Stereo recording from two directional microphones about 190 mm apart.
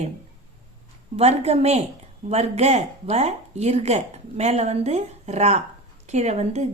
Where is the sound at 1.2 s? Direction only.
35° right (ahead or behind).